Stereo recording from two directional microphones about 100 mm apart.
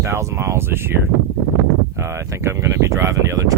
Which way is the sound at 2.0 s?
25° right (ahead or behind).